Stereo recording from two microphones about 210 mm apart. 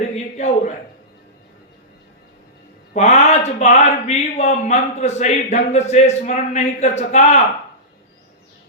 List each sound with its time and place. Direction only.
0.3 s speech: 35° left (ahead or behind)
2.9 s speech: 30° left (ahead or behind)